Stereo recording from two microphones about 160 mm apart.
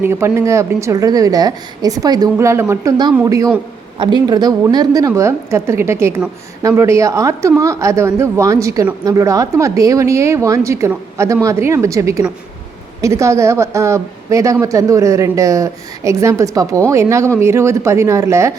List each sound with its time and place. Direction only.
0.0 s a woman's voice: 15° right (ahead or behind)